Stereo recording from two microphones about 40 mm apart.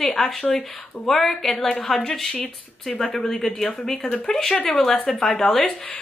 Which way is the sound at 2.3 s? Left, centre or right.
Left.